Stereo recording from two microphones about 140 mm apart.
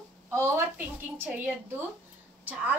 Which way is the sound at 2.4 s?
10° right (ahead or behind).